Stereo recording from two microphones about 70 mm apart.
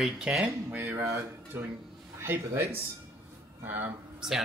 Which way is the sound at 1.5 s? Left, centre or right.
Right.